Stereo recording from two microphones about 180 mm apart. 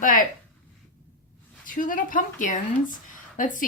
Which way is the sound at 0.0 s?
50° left (ahead or behind).